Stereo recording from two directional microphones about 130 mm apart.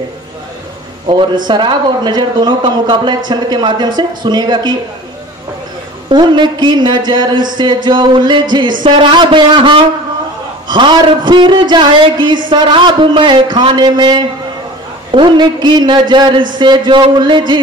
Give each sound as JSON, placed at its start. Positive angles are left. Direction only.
{"t": 1.5, "sound": "a man's voice", "side_deg": -35}
{"t": 6.0, "sound": "a man's voice", "side_deg": -35}